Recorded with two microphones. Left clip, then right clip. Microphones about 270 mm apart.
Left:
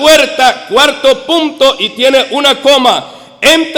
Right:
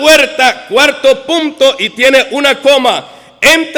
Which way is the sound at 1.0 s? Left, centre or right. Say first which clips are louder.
Even; right.